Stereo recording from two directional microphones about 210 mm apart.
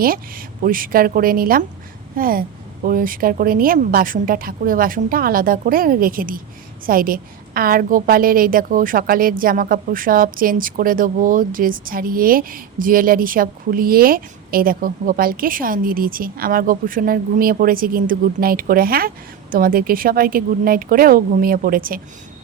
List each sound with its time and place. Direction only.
0.0 s a woman's voice: 45° right (ahead or behind)